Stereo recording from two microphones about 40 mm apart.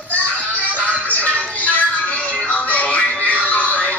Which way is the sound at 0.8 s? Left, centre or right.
Left.